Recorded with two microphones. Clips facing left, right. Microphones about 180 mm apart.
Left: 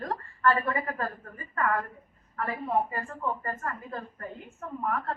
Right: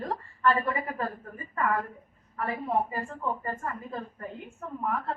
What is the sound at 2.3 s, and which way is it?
Speech, 15° right (ahead or behind).